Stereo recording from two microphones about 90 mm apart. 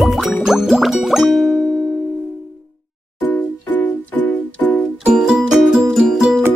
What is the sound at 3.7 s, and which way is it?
Music, 20° left (ahead or behind).